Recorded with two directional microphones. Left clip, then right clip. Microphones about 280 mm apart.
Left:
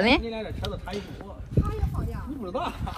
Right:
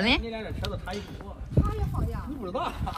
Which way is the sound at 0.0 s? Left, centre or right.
Centre.